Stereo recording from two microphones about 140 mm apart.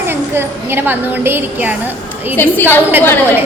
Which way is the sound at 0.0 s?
15° right (ahead or behind).